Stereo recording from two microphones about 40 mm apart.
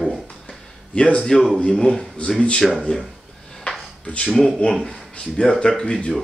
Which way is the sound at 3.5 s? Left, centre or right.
Centre.